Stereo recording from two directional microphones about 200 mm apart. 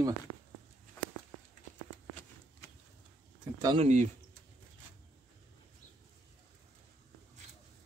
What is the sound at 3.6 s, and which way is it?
Speech, 25° right (ahead or behind).